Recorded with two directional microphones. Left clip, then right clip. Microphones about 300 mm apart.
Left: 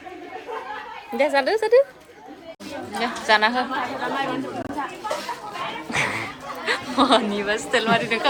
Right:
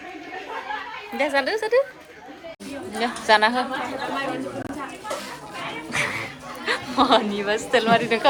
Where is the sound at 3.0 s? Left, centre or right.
Centre.